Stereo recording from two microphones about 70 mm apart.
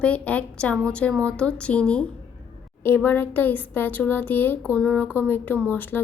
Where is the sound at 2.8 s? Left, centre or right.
Left.